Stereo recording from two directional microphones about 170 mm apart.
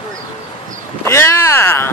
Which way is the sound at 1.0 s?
15° left (ahead or behind).